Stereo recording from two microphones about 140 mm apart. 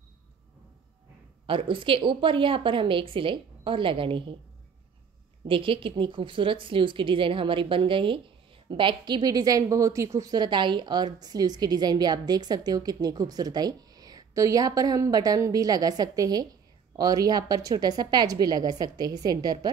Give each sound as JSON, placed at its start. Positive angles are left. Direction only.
{"t": 1.4, "sound": "a woman's voice", "side_deg": -40}
{"t": 5.5, "sound": "a woman's voice", "side_deg": -40}